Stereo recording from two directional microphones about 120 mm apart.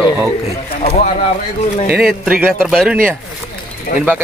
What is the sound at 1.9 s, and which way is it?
Speech, 10° right (ahead or behind).